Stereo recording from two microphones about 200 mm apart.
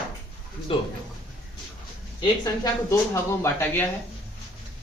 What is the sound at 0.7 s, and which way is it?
Speech, 25° left (ahead or behind).